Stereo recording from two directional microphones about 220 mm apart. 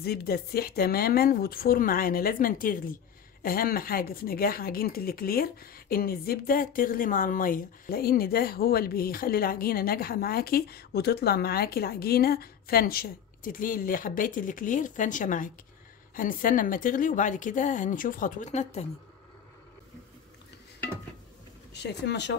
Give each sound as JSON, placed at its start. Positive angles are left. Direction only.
{"t": 0.0, "sound": "speech", "side_deg": 45}
{"t": 21.7, "sound": "speech", "side_deg": 50}